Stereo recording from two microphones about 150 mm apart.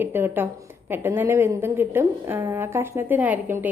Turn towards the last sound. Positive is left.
turn(degrees=-10)  # may be behind; listen again after turning